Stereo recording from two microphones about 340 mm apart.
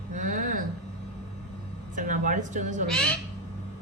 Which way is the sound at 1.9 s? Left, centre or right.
Right.